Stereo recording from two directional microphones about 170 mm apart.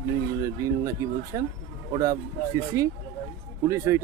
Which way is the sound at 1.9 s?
20° right (ahead or behind).